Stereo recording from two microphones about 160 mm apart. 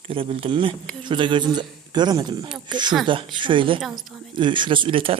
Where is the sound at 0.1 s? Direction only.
35° right (ahead or behind).